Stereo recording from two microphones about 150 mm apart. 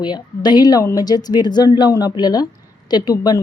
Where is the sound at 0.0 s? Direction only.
30° left (ahead or behind).